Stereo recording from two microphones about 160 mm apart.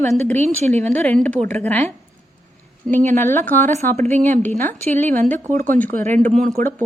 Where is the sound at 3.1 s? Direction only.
15° left (ahead or behind).